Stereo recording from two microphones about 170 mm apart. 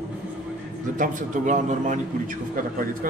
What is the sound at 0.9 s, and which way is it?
A man's voice, 50° right (ahead or behind).